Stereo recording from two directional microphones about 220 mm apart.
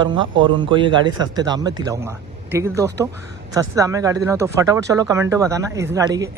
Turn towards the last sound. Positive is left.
turn(degrees=-15)  # may be behind; listen again after turning